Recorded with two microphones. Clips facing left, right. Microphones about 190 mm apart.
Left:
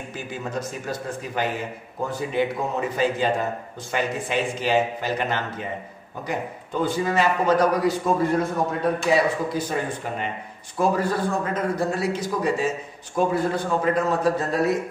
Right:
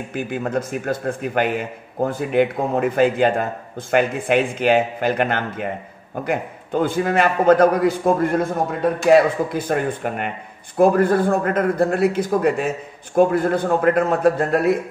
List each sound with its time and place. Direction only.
0.1 s a man's voice: 55° right (ahead or behind)